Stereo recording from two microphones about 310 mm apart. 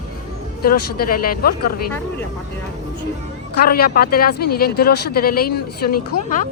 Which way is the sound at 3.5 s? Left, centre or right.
Left.